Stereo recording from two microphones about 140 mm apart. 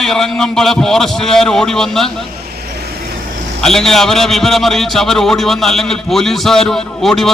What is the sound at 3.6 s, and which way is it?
A man's voice, 5° left (ahead or behind).